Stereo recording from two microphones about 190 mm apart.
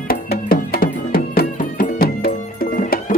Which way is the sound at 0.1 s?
50° left (ahead or behind).